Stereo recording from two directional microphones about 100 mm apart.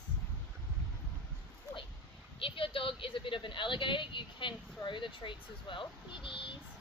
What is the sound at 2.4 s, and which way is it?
Speech, 60° left (ahead or behind).